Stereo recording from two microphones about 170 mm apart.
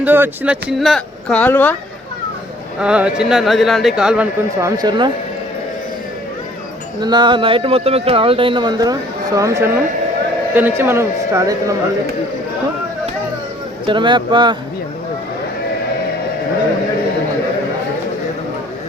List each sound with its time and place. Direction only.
0.0 s speech: 10° right (ahead or behind); by 1.7 s 10° left (ahead or behind)
2.8 s speech: 5° right (ahead or behind)
4.6 s speech: 25° right (ahead or behind)
7.0 s speech: 25° right (ahead or behind)
13.8 s speech: 30° right (ahead or behind)